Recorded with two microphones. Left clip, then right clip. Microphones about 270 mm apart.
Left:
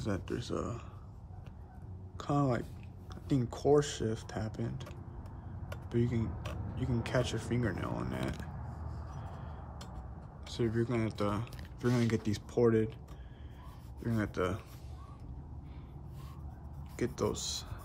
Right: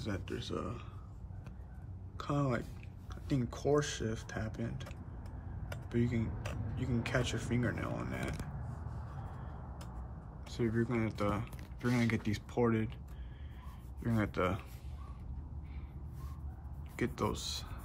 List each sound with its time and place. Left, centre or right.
0.0 s speech: centre
2.1 s speech: centre
5.9 s speech: centre
7.4 s speech: left
7.8 s speech: centre
10.5 s speech: centre
14.0 s speech: centre
16.9 s speech: centre